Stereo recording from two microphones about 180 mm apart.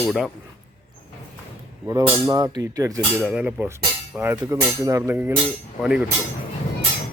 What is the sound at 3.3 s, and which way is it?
Speech, 5° right (ahead or behind).